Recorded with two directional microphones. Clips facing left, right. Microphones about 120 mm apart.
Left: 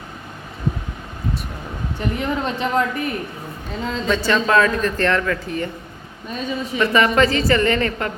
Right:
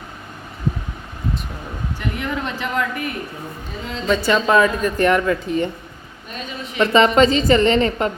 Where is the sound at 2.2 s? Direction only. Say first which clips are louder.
Left 3 dB; 30° left (ahead or behind).